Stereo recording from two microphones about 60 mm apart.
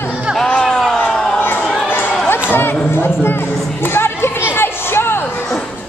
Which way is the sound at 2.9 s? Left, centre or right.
Left.